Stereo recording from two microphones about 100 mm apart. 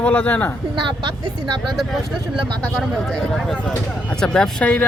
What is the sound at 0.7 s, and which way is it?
Speech, 50° right (ahead or behind).